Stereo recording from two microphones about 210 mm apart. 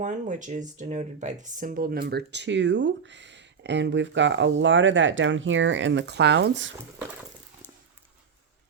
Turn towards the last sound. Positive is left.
turn(degrees=-60)  # may be behind; listen again after turning